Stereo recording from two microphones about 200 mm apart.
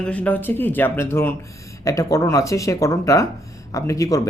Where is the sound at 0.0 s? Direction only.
5° left (ahead or behind).